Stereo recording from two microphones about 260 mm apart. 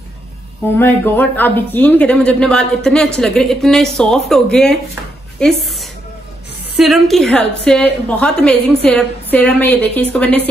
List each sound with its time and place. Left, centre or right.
0.7 s a man's voice: centre